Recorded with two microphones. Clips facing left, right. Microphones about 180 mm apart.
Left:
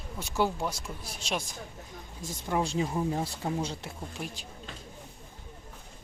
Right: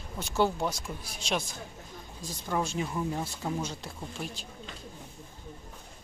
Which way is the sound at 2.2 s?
20° left (ahead or behind).